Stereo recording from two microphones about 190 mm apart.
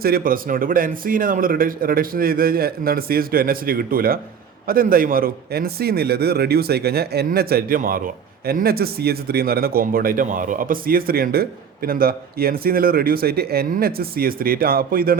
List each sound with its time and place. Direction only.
0.0 s a man's voice: 50° right (ahead or behind)